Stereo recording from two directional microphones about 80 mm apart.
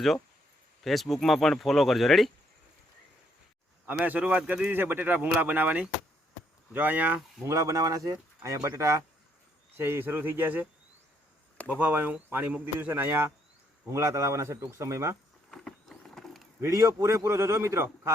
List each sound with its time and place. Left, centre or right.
0.9 s speech: centre
3.8 s speech: right
7.4 s a man's voice: right
9.7 s speech: right
11.7 s a man's voice: right
15.4 s a sound: centre
16.6 s a man's voice: right